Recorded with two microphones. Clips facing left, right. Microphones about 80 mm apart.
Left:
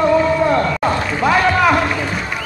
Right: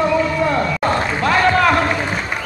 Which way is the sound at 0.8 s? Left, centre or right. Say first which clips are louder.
Left 1 dB; centre.